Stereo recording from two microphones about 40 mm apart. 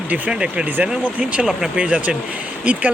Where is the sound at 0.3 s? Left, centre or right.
Right.